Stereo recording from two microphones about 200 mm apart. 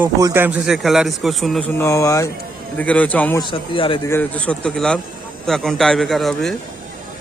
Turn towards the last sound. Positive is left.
turn(degrees=0)  # may be behind; listen again after turning